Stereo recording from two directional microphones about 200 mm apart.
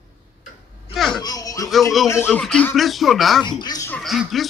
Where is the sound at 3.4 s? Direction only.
20° left (ahead or behind).